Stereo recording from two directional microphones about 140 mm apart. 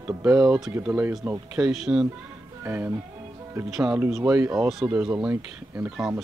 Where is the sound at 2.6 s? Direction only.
15° right (ahead or behind).